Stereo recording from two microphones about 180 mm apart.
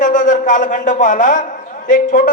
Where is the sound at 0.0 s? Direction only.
45° left (ahead or behind).